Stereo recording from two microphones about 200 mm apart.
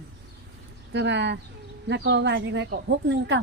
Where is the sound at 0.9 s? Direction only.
60° right (ahead or behind).